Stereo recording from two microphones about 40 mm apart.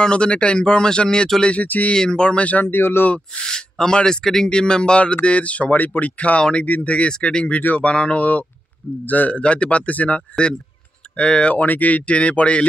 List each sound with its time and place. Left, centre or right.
0.0 s speech: left
1.6 s a man's voice: left
2.0 s speech: left
2.6 s speech: left
3.4 s speech: centre
4.5 s speech: left
5.0 s speech: left
7.1 s speech: left
9.0 s a man's voice: left
9.3 s speech: left
11.1 s speech: left
11.5 s speech: left